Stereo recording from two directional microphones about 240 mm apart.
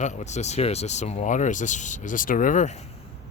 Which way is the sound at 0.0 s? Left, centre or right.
Left.